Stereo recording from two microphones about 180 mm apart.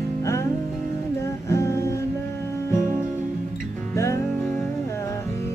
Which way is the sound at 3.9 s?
15° left (ahead or behind).